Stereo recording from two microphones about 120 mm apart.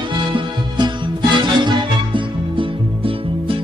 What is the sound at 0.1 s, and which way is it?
Music, 40° right (ahead or behind).